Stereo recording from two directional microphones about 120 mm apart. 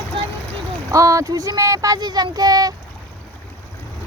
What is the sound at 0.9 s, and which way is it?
Speech, 25° right (ahead or behind).